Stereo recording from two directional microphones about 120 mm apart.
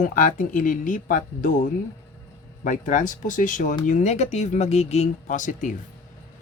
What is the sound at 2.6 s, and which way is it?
Speech, 90° left.